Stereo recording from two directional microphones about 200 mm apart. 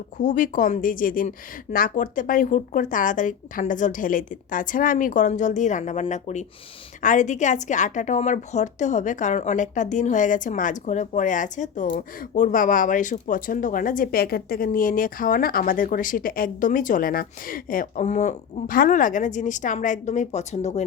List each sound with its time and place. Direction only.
0.2 s a woman's voice: 40° left (ahead or behind)